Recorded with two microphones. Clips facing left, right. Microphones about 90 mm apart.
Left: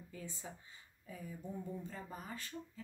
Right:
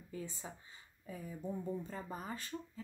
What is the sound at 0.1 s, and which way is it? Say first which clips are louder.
Speech: right 5 dB; 25° right (ahead or behind).